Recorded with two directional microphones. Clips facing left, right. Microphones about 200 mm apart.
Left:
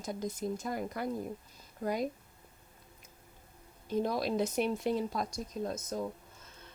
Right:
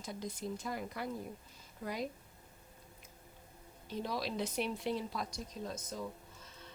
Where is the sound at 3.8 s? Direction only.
50° left (ahead or behind).